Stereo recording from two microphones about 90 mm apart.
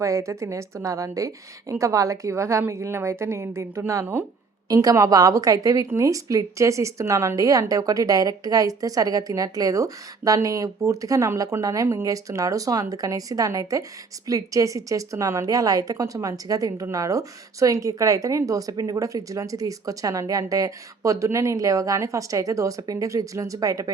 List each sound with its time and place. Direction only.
0.0 s a woman's voice: 35° right (ahead or behind)